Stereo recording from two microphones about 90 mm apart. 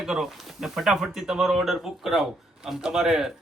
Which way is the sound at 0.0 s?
5° right (ahead or behind).